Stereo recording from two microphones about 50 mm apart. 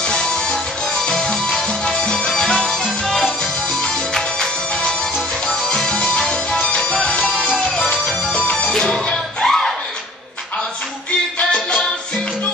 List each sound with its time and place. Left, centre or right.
0.1 s music: centre
7.3 s music: centre
7.6 s music: centre
11.3 s music: centre